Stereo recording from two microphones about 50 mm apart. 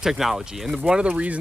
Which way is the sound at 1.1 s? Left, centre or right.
Right.